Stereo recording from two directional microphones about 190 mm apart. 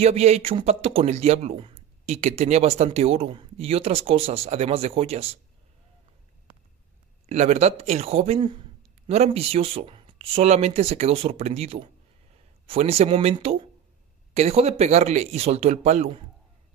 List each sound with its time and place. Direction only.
0.0 s speech: 35° right (ahead or behind)
7.2 s speech: 35° right (ahead or behind)